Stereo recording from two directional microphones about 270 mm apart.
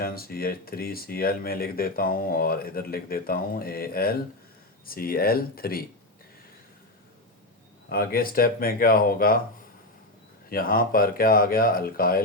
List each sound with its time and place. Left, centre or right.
0.0 s speech: left
7.9 s speech: left
10.5 s speech: left